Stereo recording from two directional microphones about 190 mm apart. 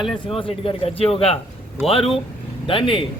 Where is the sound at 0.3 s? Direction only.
30° left (ahead or behind).